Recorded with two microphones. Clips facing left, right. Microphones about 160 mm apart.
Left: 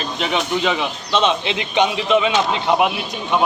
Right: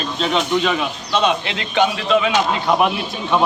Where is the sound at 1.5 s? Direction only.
20° left (ahead or behind).